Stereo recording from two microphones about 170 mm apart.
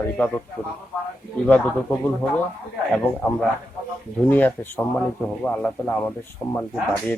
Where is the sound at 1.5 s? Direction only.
10° left (ahead or behind).